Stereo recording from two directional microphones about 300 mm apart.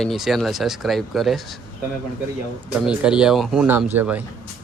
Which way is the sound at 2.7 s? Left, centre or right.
Centre.